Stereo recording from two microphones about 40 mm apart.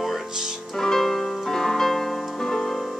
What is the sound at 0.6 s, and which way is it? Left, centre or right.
Music, centre.